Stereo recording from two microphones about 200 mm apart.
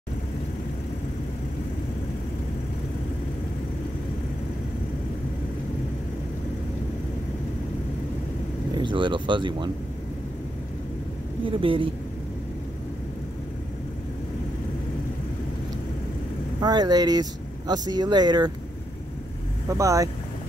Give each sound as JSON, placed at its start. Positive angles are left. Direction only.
{"t": 8.7, "sound": "speech", "side_deg": -25}
{"t": 11.4, "sound": "speech", "side_deg": -25}
{"t": 16.6, "sound": "speech", "side_deg": -20}
{"t": 19.7, "sound": "speech", "side_deg": -15}